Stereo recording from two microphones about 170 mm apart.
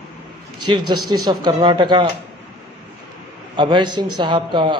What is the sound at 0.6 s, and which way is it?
A man's voice, 25° right (ahead or behind).